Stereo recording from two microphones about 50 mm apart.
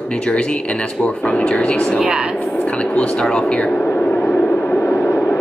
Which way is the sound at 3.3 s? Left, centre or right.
Centre.